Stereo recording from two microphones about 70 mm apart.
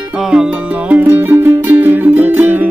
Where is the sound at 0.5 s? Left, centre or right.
Right.